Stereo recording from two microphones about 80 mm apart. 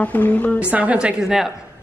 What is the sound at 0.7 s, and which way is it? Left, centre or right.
Speech, centre.